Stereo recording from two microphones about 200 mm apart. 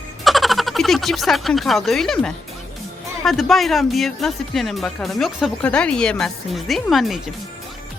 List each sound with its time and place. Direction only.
0.3 s speech: centre (ahead or behind)